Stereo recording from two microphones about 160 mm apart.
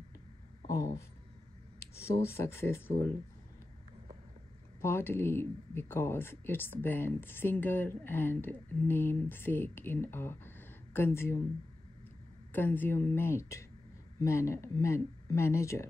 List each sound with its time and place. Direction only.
1.8 s speech: 15° left (ahead or behind)
4.8 s speech: 15° left (ahead or behind)
12.5 s speech: 10° left (ahead or behind)